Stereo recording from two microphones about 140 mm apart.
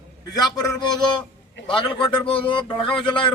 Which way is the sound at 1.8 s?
35° left (ahead or behind).